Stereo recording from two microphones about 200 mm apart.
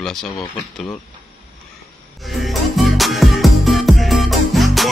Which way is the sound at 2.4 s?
Centre (ahead or behind).